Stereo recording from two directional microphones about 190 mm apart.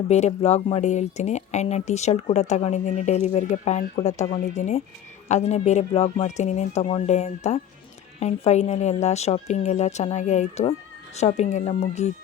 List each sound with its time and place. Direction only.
0.1 s speech: 35° left (ahead or behind)